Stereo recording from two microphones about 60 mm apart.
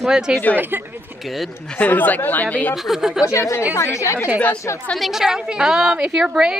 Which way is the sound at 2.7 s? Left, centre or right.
Centre.